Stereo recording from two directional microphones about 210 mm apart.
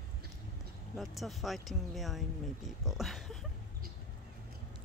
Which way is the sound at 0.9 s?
Centre (ahead or behind).